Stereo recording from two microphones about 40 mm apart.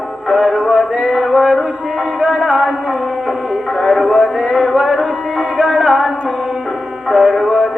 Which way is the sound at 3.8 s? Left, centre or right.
Centre.